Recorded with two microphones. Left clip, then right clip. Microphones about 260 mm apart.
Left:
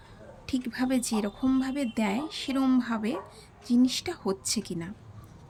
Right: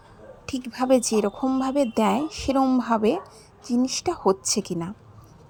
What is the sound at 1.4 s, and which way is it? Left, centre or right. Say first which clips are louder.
Speech: right 4 dB; right.